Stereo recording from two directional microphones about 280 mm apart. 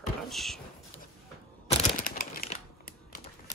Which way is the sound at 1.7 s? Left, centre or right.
Left.